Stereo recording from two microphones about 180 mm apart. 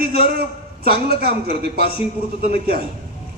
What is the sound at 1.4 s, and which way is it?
Speech, 60° right (ahead or behind).